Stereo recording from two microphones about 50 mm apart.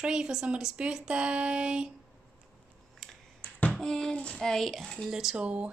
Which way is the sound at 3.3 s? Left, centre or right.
Left.